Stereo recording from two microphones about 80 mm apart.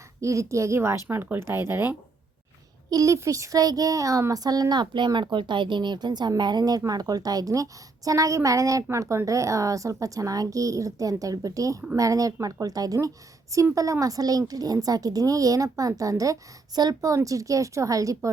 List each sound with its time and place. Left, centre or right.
0.2 s speech: right
2.9 s speech: right
4.8 s speech: right